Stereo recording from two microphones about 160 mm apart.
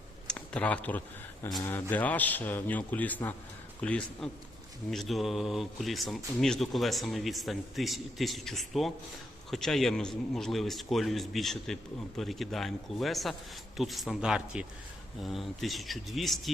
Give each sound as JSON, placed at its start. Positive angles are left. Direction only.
{"t": 0.3, "sound": "speech", "side_deg": 5}
{"t": 1.5, "sound": "speech", "side_deg": 25}
{"t": 1.7, "sound": "a man's voice", "side_deg": 10}